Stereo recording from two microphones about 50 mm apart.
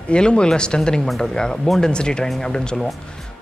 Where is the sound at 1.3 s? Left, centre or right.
Centre.